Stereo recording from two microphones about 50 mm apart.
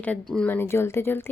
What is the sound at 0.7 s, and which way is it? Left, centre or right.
Speech, left.